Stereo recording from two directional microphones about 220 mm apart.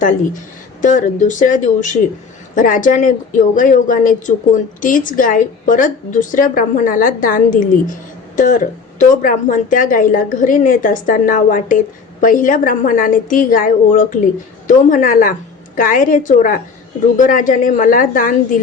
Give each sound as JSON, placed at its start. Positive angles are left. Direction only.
{"t": 0.8, "sound": "speech", "side_deg": 35}